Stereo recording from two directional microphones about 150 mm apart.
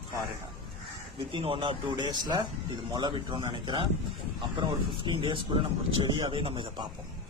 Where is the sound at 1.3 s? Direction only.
35° right (ahead or behind).